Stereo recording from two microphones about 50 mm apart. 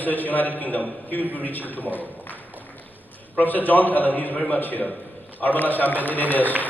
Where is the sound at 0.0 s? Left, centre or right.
Left.